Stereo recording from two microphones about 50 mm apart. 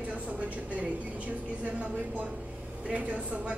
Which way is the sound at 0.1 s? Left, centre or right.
Right.